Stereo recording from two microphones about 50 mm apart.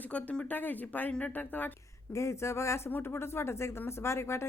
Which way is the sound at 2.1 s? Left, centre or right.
Left.